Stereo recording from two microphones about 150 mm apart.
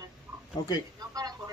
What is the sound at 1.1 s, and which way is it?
Speech, 25° right (ahead or behind).